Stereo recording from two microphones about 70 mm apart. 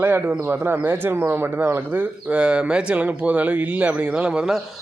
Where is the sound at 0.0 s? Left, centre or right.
Right.